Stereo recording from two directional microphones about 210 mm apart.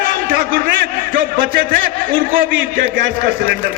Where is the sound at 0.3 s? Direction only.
45° right (ahead or behind).